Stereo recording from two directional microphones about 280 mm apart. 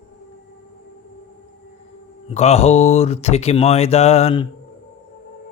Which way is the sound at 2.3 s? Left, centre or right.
Left.